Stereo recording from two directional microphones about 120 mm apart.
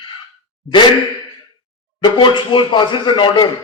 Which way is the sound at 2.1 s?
40° left (ahead or behind).